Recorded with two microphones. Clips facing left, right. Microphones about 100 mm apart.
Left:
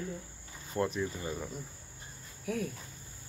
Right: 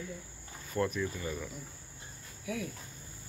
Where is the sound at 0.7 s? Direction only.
25° left (ahead or behind).